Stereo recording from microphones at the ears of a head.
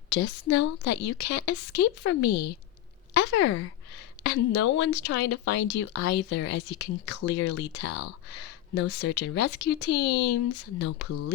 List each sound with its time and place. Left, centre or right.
0.1 s speech: left